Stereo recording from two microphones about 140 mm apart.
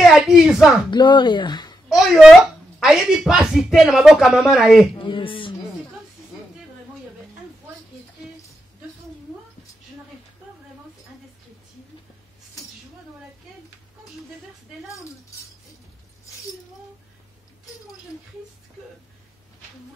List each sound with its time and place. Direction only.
0.2 s speech: 5° right (ahead or behind)
0.8 s speech: 35° left (ahead or behind)
1.9 s a sound: 5° right (ahead or behind)
2.8 s speech: 5° right (ahead or behind)
4.9 s speech: 35° left (ahead or behind)